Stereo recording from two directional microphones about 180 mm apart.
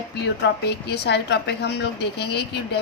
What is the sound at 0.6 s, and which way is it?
A woman's voice, 65° left (ahead or behind).